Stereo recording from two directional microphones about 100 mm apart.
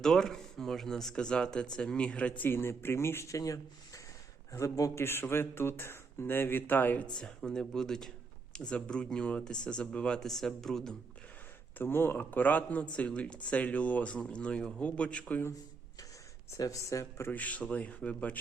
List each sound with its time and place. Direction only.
0.0 s a man's voice: 5° left (ahead or behind)
2.4 s speech: 20° left (ahead or behind)
7.2 s a man's voice: 5° left (ahead or behind)
11.8 s a man's voice: 20° left (ahead or behind)
16.5 s speech: 35° left (ahead or behind)
17.3 s a man's voice: 15° left (ahead or behind)